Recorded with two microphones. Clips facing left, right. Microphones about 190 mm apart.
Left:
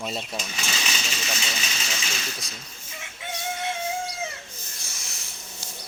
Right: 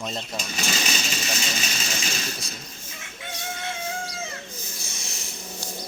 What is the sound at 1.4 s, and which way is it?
Vehicle, 40° right (ahead or behind).